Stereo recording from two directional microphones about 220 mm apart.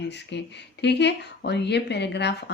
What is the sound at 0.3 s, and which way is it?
Speech, 50° left (ahead or behind).